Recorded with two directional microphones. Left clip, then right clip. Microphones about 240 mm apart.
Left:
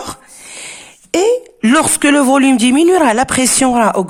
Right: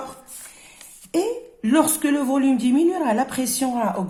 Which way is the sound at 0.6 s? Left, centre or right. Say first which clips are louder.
Left 14 dB; left.